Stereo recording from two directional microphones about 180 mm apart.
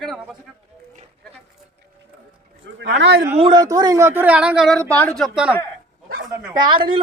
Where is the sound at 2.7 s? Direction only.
80° right.